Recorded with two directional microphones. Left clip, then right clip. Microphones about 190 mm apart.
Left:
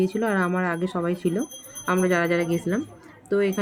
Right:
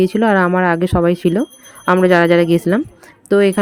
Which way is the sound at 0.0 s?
45° right (ahead or behind).